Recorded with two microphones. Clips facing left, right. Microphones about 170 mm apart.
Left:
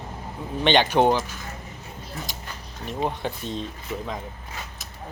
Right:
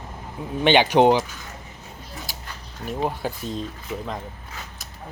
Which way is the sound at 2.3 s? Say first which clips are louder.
Left 1 dB; 5° right (ahead or behind).